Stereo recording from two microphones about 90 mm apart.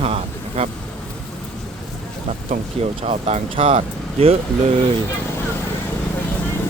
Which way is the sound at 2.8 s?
90° right.